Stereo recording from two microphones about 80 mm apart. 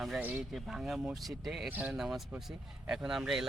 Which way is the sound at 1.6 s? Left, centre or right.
Right.